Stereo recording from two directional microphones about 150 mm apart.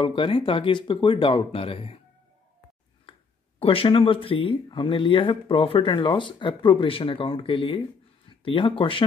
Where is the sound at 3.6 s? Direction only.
40° left (ahead or behind).